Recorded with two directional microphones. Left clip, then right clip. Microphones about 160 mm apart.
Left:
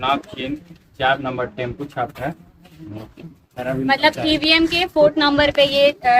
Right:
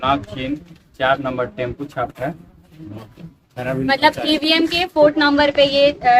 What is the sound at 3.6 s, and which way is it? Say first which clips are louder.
Speech: right 1 dB; 15° right (ahead or behind).